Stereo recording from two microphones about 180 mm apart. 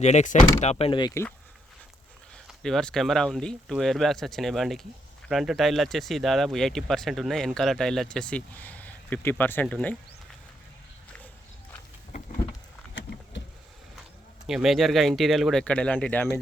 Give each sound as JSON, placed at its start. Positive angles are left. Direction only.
{"t": 0.0, "sound": "speech", "side_deg": 40}
{"t": 2.5, "sound": "speech", "side_deg": 0}
{"t": 12.9, "sound": "vehicle", "side_deg": 90}
{"t": 14.4, "sound": "speech", "side_deg": -5}